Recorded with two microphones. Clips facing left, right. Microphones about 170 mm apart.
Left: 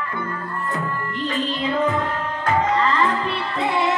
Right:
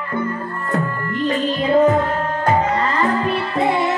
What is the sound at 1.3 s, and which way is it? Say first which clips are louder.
Music: right 7 dB; 45° right (ahead or behind).